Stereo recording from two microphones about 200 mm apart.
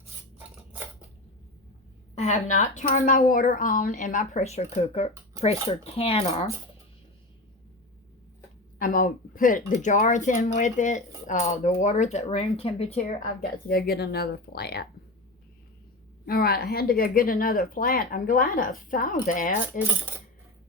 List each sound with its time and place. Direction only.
2.1 s speech: 35° left (ahead or behind)
8.8 s speech: 45° left (ahead or behind)
16.2 s speech: 50° left (ahead or behind)